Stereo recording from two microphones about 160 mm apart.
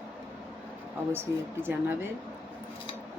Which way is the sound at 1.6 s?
15° right (ahead or behind).